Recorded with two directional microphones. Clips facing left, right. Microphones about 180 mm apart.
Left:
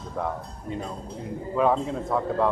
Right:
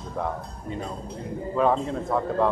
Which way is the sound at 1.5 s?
5° left (ahead or behind).